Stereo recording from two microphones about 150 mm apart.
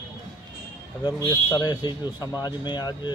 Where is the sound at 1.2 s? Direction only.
25° left (ahead or behind).